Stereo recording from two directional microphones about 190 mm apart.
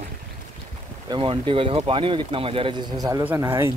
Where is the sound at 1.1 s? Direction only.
30° right (ahead or behind).